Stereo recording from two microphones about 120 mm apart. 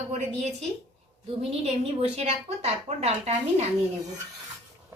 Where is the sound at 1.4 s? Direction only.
55° right (ahead or behind).